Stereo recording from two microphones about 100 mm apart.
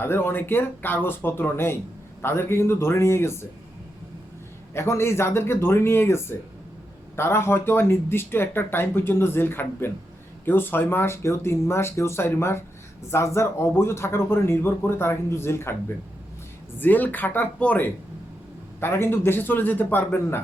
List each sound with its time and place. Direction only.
0.0 s speech: 25° left (ahead or behind)
4.7 s speech: 25° left (ahead or behind)
16.7 s speech: 20° left (ahead or behind)